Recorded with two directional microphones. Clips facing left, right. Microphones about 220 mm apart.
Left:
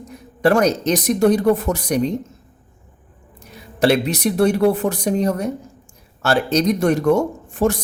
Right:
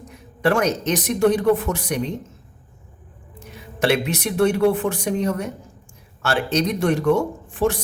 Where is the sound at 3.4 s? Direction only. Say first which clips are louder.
Left 4 dB; 35° left (ahead or behind).